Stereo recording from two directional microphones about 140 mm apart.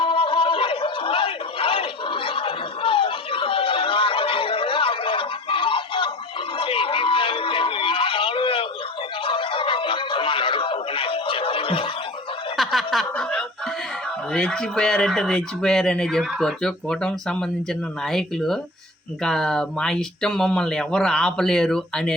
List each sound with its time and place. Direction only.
0.0 s a sound: 40° left (ahead or behind)
12.5 s snicker: centre (ahead or behind)
14.3 s speech: 5° left (ahead or behind)